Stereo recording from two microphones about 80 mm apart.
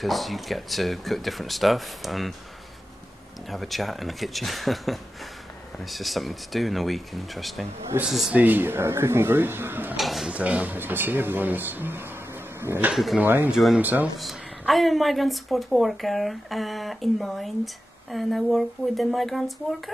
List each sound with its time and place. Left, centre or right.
0.0 s a woman's voice: centre
3.4 s a woman's voice: centre
7.9 s speech: right
8.3 s speech: right
9.9 s speech: centre
10.3 s speech: centre
12.9 s a woman's voice: centre
13.2 s speech: right
14.2 s a woman's voice: centre